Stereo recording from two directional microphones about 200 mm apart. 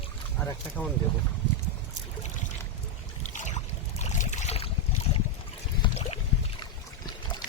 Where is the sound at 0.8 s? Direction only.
5° left (ahead or behind).